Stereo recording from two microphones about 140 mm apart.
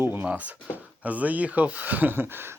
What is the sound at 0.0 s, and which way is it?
Speech, 15° right (ahead or behind).